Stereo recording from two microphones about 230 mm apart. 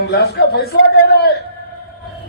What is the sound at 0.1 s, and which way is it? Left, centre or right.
Speech, left.